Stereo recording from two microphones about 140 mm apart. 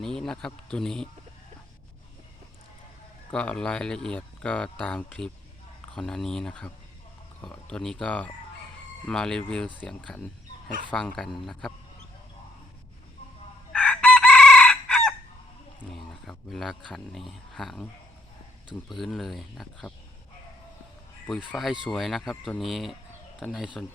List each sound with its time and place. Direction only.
0.0 s a man's voice: 5° left (ahead or behind)
3.3 s a man's voice: 5° left (ahead or behind)
13.7 s chicken: 5° left (ahead or behind)
16.5 s a man's voice: 5° left (ahead or behind)
18.9 s a man's voice: centre (ahead or behind)
21.3 s a man's voice: 10° left (ahead or behind)